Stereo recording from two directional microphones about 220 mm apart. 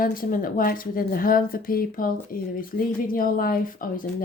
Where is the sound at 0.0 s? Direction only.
40° left (ahead or behind).